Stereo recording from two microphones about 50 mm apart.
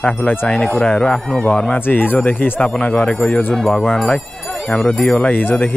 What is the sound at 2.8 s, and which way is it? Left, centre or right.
Speech, left.